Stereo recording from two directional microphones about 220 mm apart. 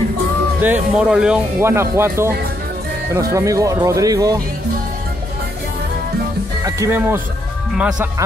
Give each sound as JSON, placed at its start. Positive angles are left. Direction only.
{"t": 0.6, "sound": "speech", "side_deg": -5}
{"t": 6.6, "sound": "speech", "side_deg": -10}